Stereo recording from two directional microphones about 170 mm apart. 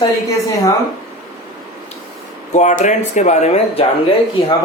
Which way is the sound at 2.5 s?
45° left (ahead or behind).